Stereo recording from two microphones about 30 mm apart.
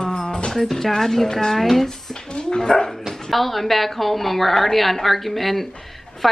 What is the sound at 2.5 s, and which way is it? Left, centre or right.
Speech, left.